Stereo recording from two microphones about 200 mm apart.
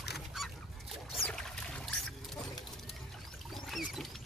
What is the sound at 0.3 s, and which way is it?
Goose, centre (ahead or behind).